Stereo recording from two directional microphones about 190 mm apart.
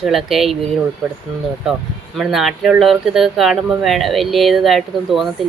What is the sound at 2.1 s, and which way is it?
Speech, centre (ahead or behind).